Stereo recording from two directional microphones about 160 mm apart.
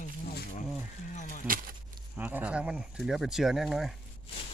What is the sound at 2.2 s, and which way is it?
Speech, 10° right (ahead or behind).